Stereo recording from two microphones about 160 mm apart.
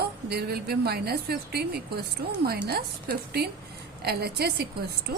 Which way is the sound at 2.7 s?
75° right (ahead or behind).